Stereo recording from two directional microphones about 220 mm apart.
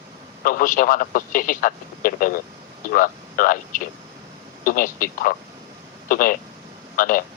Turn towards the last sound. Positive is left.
turn(degrees=40)  # may be behind; listen again after turning